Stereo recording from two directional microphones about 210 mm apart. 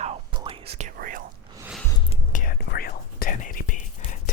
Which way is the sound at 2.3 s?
40° left (ahead or behind).